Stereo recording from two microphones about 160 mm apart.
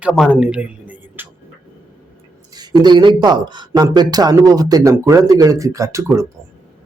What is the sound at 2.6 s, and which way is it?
Speech, 25° right (ahead or behind).